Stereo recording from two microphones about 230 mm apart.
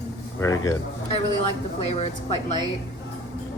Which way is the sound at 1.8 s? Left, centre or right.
Left.